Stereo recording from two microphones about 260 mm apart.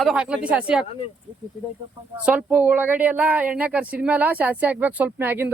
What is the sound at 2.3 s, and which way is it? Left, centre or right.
Speech, centre.